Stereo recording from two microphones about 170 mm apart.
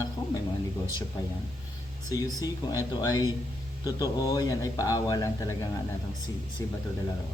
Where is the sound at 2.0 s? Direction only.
20° left (ahead or behind).